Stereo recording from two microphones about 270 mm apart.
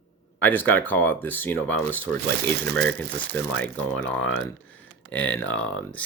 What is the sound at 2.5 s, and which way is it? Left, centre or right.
Speech, right.